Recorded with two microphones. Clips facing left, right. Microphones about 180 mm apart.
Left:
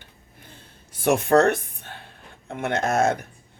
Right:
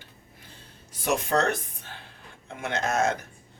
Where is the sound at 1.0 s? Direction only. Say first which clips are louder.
Left 7 dB; 55° left (ahead or behind).